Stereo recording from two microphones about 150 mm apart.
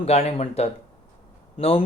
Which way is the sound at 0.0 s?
45° left (ahead or behind).